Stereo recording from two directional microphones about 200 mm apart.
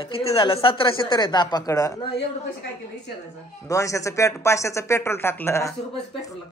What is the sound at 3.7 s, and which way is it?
Speech, 15° left (ahead or behind).